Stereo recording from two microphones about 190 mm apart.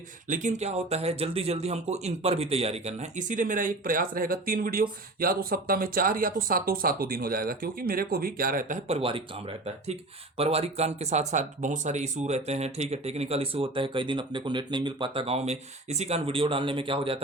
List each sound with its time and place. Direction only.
0.3 s speech: 40° right (ahead or behind)
9.0 s speech: 30° right (ahead or behind)